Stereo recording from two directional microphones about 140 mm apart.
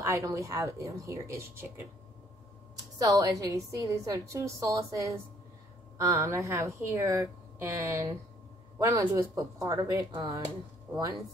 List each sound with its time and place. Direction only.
0.0 s a woman's voice: 25° right (ahead or behind)
3.0 s a woman's voice: 25° right (ahead or behind)